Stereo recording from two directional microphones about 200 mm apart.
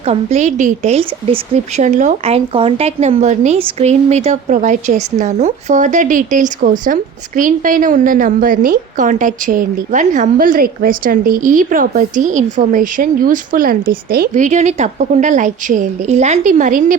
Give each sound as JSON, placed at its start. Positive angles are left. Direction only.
{"t": 0.0, "sound": "a woman's voice", "side_deg": -35}